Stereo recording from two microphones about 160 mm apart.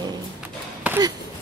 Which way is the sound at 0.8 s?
10° right (ahead or behind).